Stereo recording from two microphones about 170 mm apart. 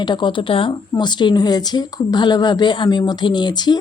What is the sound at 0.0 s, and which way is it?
Speech, 25° left (ahead or behind).